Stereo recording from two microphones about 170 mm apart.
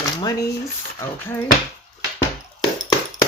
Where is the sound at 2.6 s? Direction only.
20° left (ahead or behind).